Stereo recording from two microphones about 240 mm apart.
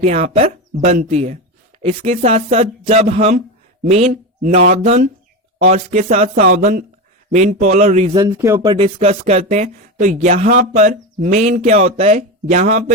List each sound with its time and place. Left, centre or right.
0.0 s speech: right
8.1 s speech: centre; by 12.8 s right